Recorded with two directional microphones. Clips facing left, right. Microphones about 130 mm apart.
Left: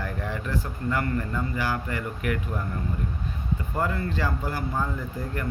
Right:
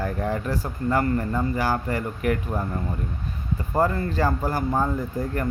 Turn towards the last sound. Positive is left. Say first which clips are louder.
# right 5 dB
turn(degrees=-45)  # may be behind; listen again after turning